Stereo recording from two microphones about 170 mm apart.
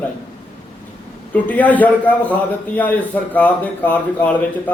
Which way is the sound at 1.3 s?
10° left (ahead or behind).